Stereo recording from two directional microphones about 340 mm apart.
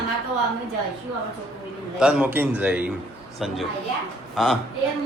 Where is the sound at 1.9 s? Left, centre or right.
Centre.